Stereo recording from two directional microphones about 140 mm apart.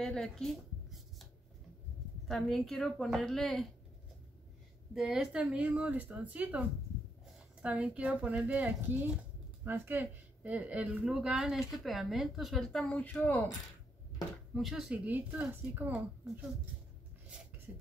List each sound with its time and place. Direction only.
0.0 s speech: 5° left (ahead or behind)
2.2 s speech: centre (ahead or behind)
4.9 s speech: centre (ahead or behind)
14.5 s speech: centre (ahead or behind)